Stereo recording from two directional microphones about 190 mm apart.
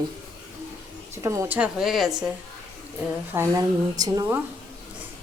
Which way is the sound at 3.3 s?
15° right (ahead or behind).